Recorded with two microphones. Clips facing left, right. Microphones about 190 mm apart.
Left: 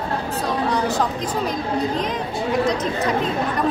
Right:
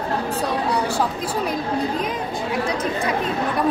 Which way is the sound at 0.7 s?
10° right (ahead or behind).